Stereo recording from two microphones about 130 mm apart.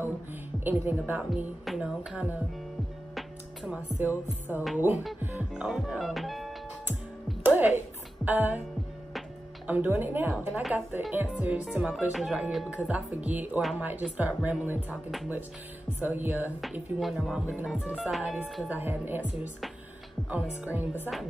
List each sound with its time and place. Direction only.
0.7 s speech: 15° right (ahead or behind)
3.2 s music: 5° right (ahead or behind)
4.7 s speech: 15° right (ahead or behind)
5.2 s music: 15° right (ahead or behind)
5.5 s speech: 5° right (ahead or behind)
8.3 s speech: 15° right (ahead or behind)
9.7 s speech: 15° right (ahead or behind)
16.0 s speech: 15° right (ahead or behind)